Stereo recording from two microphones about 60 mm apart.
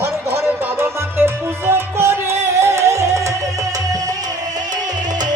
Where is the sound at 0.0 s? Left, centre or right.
Right.